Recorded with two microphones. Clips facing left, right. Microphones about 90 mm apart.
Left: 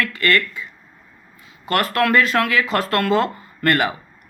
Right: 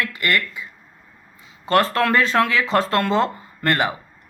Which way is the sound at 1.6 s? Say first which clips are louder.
Right 1 dB; 30° right (ahead or behind).